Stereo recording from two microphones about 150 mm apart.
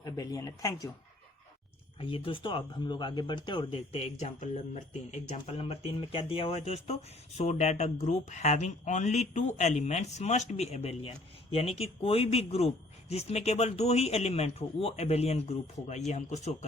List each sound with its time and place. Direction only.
0.0 s speech: 25° left (ahead or behind)
2.0 s speech: 35° left (ahead or behind)